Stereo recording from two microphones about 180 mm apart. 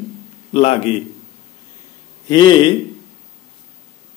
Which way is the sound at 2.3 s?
25° left (ahead or behind).